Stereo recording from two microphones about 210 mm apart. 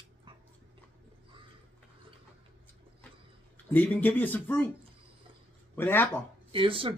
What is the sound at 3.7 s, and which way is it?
Speech, 10° left (ahead or behind).